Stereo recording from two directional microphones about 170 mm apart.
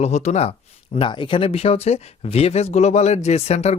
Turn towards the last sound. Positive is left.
turn(degrees=40)  # may be behind; listen again after turning